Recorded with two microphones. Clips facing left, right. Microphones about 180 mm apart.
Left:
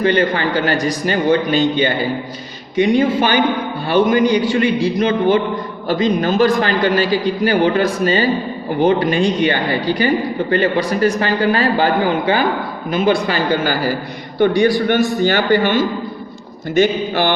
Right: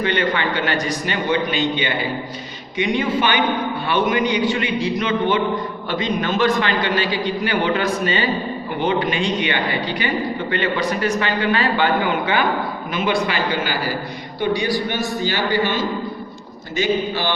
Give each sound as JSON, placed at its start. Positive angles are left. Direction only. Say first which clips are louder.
{"t": 0.0, "sound": "a man's voice", "louder": "left 5 dB", "side_deg": 35}
{"t": 14.3, "sound": "a man's voice", "louder": "left 7 dB", "side_deg": 55}